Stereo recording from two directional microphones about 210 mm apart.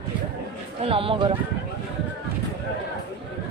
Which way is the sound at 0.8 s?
25° right (ahead or behind).